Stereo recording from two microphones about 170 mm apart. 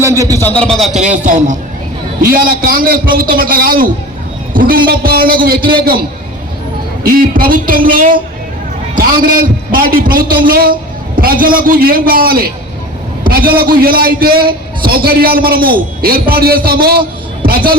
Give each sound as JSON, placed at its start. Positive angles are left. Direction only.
{"t": 0.0, "sound": "speech", "side_deg": -20}
{"t": 0.3, "sound": "speech", "side_deg": 10}
{"t": 0.9, "sound": "a man's voice", "side_deg": -45}